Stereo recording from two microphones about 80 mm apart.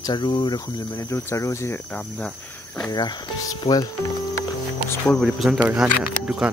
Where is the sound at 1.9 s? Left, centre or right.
Centre.